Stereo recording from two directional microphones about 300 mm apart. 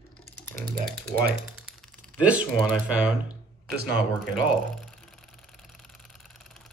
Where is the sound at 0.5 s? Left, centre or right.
Centre.